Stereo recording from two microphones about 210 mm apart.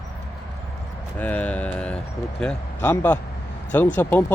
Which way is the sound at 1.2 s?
5° left (ahead or behind).